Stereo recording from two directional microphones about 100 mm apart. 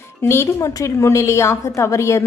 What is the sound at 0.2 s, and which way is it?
A woman's voice, 25° left (ahead or behind).